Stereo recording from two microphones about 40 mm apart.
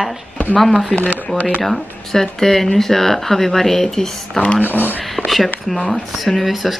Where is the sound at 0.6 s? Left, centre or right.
Centre.